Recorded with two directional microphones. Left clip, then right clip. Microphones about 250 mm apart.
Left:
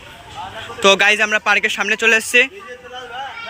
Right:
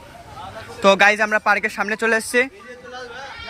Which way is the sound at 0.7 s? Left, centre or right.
Centre.